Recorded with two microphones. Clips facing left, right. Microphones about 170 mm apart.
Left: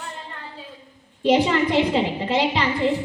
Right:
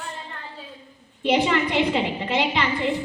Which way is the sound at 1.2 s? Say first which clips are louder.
Left 3 dB; 35° left (ahead or behind).